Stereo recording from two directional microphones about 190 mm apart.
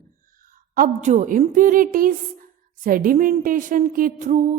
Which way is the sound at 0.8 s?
40° right (ahead or behind).